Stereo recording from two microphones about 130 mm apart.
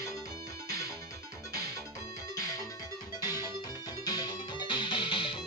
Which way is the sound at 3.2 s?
30° left (ahead or behind).